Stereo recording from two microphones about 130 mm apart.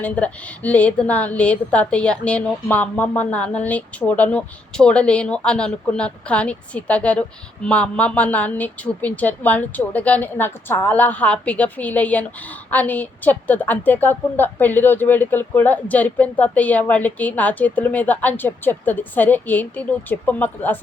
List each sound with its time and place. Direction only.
0.0 s a woman's voice: 10° left (ahead or behind)